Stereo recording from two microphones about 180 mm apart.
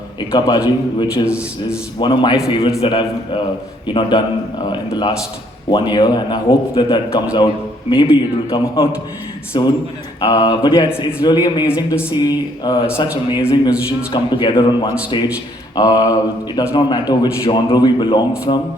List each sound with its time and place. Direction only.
0.3 s a man's voice: 25° left (ahead or behind)